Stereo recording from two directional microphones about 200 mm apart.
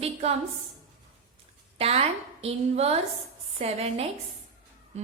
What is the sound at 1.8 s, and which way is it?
A woman's voice, 30° right (ahead or behind).